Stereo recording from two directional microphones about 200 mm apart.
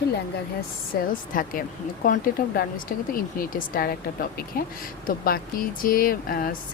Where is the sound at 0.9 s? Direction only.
45° left (ahead or behind).